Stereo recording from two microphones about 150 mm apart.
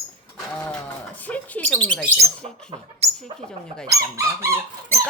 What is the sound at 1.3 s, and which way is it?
Speech, 10° left (ahead or behind).